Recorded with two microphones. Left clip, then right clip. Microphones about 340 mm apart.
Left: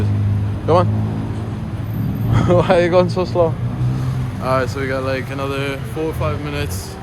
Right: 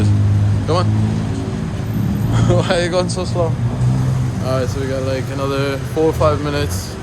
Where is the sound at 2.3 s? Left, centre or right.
Centre.